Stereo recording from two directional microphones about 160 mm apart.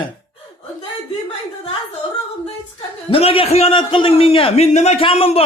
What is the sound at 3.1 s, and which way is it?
A man's voice, 35° left (ahead or behind).